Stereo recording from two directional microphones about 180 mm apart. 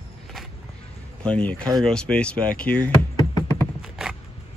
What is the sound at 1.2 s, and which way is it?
Speech, 5° left (ahead or behind).